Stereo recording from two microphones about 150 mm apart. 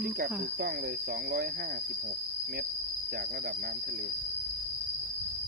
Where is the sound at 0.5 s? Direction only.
85° right.